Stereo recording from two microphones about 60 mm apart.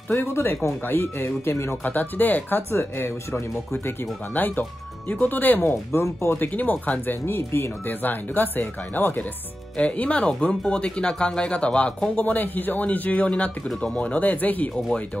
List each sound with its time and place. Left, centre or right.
0.1 s speech: left
1.8 s speech: left
2.7 s speech: left
4.3 s speech: left
5.9 s speech: left
6.4 s speech: left
7.2 s speech: left
7.9 s speech: left
9.8 s speech: left
13.7 s speech: centre
13.9 s speech: left